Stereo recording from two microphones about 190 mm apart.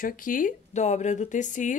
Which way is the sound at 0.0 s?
45° left (ahead or behind).